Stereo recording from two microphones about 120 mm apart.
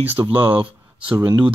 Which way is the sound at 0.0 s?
15° right (ahead or behind).